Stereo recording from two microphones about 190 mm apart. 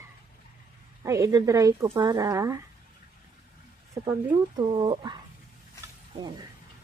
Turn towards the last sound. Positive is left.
turn(degrees=-25)  # may be behind; listen again after turning